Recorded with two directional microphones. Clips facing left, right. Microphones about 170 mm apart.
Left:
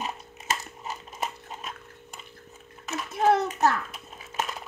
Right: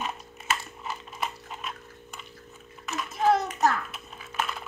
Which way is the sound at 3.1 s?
65° left (ahead or behind).